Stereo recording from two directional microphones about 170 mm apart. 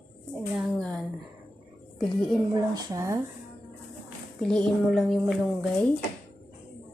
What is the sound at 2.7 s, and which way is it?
Speech, 20° right (ahead or behind).